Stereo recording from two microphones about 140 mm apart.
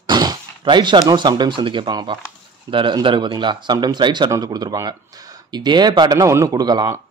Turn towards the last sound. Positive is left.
turn(degrees=-30)  # may be behind; listen again after turning